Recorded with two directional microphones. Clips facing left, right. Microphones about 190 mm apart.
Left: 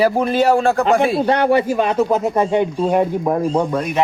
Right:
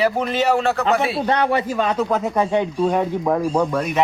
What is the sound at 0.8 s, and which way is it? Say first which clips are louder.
Speech: left 4 dB; 50° left (ahead or behind).